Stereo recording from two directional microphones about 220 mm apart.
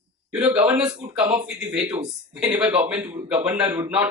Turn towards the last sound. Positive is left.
turn(degrees=-5)  # may be behind; listen again after turning